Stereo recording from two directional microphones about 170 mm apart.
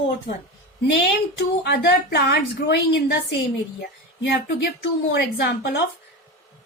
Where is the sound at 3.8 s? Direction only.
65° left (ahead or behind); by 5.8 s 80° left.